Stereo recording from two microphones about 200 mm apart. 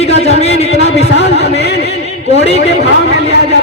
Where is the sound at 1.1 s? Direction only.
60° left (ahead or behind).